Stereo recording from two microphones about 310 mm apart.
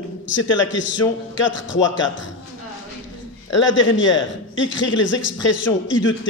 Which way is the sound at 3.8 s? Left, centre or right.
Left.